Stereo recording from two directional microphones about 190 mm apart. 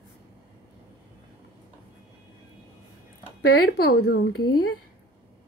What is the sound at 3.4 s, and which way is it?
Speech, 60° left (ahead or behind).